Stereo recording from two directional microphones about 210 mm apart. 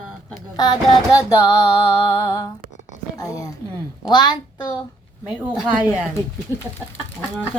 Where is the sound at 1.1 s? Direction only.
15° left (ahead or behind).